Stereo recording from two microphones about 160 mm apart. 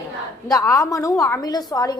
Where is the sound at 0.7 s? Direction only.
20° left (ahead or behind).